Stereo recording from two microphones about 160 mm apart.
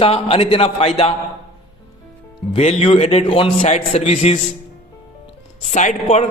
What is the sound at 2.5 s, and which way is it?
Speech, 45° left (ahead or behind).